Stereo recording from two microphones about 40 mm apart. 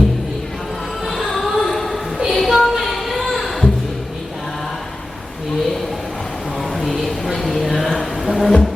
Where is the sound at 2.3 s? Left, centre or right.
Centre.